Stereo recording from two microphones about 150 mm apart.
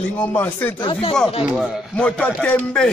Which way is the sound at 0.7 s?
35° left (ahead or behind).